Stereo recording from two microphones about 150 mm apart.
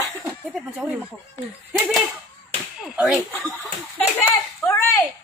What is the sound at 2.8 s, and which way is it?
Speech, 5° right (ahead or behind).